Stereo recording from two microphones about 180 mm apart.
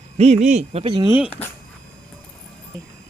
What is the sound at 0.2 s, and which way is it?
Speech, 35° right (ahead or behind).